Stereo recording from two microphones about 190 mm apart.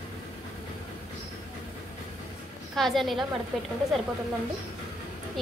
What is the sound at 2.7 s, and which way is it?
Speech, centre (ahead or behind).